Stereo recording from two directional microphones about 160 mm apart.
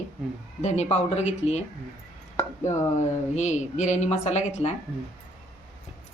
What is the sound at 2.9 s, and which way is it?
Speech, 45° left (ahead or behind).